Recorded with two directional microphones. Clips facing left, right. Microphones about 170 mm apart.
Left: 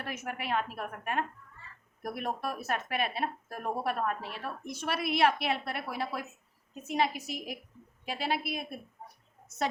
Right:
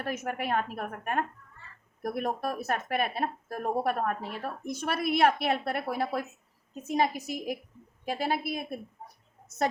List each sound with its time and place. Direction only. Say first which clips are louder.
0.0 s a woman's voice: right 5 dB; 45° right (ahead or behind)